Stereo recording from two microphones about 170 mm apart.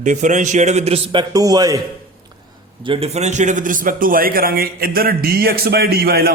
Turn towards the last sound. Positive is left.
turn(degrees=-65)  # may be behind; listen again after turning